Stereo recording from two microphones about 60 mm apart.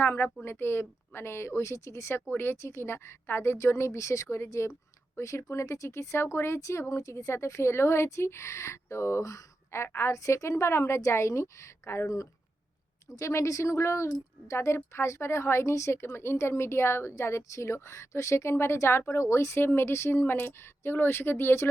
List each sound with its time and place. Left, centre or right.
0.0 s a woman's voice: left
2.3 s speech: left